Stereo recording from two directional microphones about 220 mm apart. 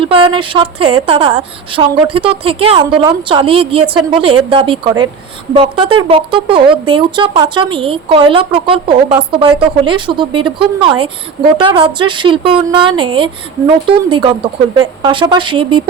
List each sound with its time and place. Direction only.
0.0 s a woman's voice: 25° right (ahead or behind)